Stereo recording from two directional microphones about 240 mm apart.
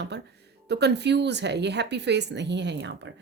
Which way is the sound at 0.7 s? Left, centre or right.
Right.